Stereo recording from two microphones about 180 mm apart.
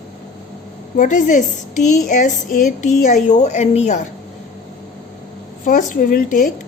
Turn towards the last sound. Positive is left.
turn(degrees=45)  # may be behind; listen again after turning